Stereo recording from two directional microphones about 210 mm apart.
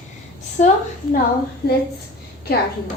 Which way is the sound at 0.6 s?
35° left (ahead or behind).